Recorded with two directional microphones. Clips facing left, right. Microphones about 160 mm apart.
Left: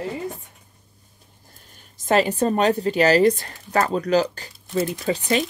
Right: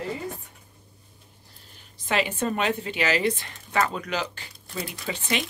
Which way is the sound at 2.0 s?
40° left (ahead or behind).